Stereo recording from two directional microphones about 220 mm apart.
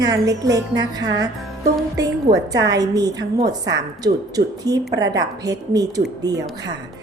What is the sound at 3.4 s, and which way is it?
Speech, 50° right (ahead or behind).